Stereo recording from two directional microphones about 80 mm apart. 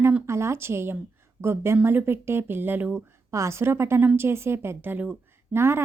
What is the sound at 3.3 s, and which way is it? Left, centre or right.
Speech, right.